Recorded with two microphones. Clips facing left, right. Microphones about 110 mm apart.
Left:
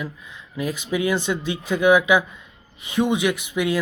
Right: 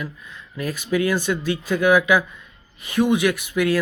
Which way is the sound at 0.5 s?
15° left (ahead or behind).